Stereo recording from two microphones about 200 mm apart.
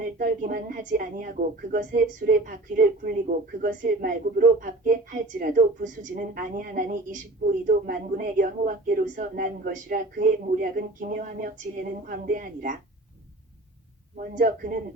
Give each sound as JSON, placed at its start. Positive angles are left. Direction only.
{"t": 0.0, "sound": "speech", "side_deg": -45}
{"t": 14.2, "sound": "speech", "side_deg": -45}